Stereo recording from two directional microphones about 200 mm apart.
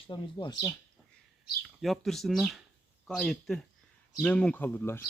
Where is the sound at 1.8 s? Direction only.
Centre (ahead or behind).